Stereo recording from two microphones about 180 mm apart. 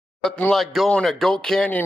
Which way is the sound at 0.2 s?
5° left (ahead or behind).